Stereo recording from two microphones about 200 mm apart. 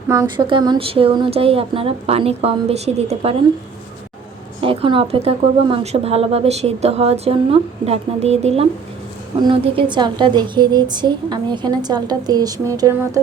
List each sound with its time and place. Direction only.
0.1 s a woman's voice: 20° right (ahead or behind)
4.6 s a woman's voice: 25° right (ahead or behind)